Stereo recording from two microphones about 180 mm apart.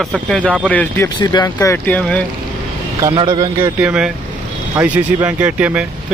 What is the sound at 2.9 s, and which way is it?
Speech, 20° right (ahead or behind).